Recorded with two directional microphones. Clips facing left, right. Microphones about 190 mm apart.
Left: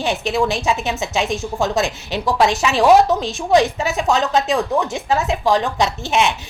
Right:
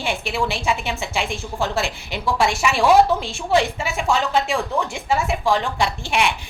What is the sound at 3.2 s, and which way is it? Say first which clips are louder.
A woman's voice: left 4 dB; 20° left (ahead or behind).